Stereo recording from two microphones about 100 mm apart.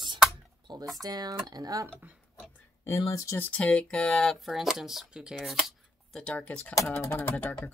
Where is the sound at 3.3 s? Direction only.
15° left (ahead or behind).